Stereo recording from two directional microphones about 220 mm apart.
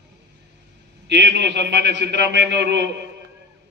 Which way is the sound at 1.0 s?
50° right (ahead or behind).